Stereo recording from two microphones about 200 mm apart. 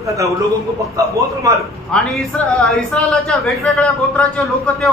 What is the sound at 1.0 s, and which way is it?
Speech, 15° right (ahead or behind).